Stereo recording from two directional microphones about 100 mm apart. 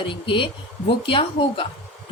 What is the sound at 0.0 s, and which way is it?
A woman's voice, 60° left (ahead or behind).